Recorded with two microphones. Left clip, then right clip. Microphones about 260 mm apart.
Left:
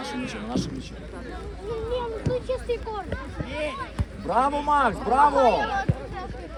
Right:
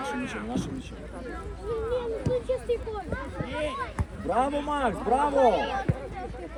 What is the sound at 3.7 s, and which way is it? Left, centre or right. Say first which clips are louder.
Speech: even; centre.